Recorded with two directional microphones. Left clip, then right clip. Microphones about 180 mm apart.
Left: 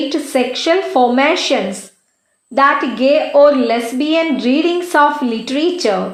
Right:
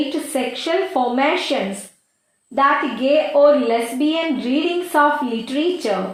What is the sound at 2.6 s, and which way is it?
A woman's voice, 35° left (ahead or behind).